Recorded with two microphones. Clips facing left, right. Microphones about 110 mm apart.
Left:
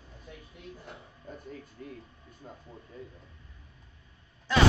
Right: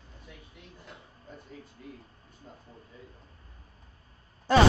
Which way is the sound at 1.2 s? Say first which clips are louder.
Left 4 dB; 50° left (ahead or behind).